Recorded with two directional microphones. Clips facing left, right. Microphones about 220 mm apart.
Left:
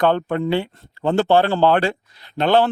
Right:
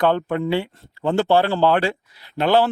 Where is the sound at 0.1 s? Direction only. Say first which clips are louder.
Left 1 dB; 30° left (ahead or behind).